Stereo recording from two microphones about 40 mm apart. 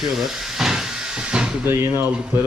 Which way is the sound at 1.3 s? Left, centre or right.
Right.